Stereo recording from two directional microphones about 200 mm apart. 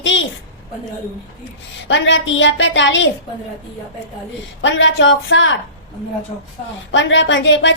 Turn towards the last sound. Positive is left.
turn(degrees=65)  # may be behind; listen again after turning